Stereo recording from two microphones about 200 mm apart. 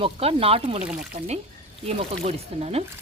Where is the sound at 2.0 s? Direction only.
30° right (ahead or behind).